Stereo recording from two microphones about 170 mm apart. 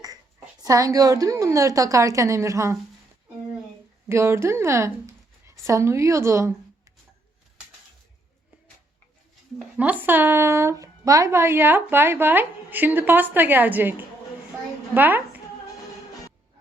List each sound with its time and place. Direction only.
0.6 s a woman's voice: 20° right (ahead or behind)
4.1 s a woman's voice: 15° right (ahead or behind)
9.6 s speech: 10° right (ahead or behind)
14.9 s a woman's voice: 10° right (ahead or behind)